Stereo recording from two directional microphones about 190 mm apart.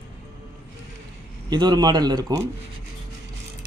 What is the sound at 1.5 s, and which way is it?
Speech, 20° right (ahead or behind).